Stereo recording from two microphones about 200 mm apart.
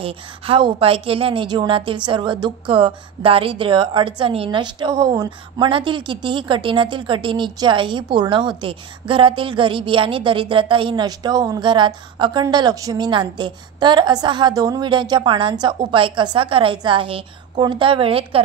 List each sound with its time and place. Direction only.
0.0 s a woman's voice: 25° right (ahead or behind)